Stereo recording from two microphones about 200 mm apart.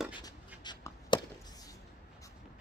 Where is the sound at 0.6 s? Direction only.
20° left (ahead or behind).